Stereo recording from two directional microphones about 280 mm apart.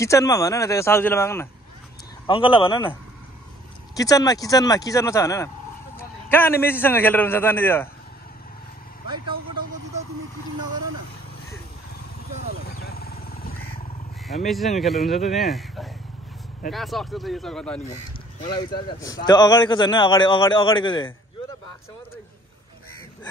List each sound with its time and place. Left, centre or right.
0.0 s a man's voice: centre
9.0 s vehicle: centre
12.4 s vehicle: left
14.5 s speech: centre
18.4 s a man's voice: centre